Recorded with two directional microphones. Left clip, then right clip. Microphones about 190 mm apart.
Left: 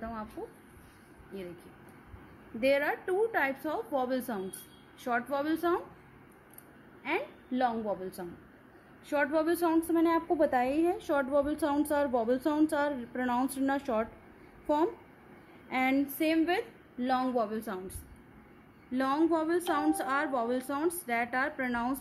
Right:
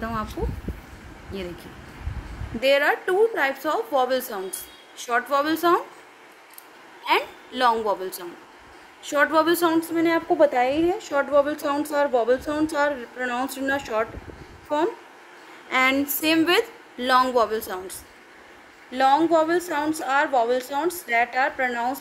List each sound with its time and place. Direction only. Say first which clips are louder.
1.3 s a woman's voice: right 9 dB; 5° right (ahead or behind)
2.6 s a woman's voice: right 9 dB; 5° right (ahead or behind)
7.1 s a woman's voice: right 11 dB; 25° right (ahead or behind)
9.0 s a woman's voice: right 9 dB; 10° right (ahead or behind)
15.7 s a woman's voice: right 9 dB; 10° right (ahead or behind)
18.9 s a woman's voice: right 10 dB; 5° left (ahead or behind)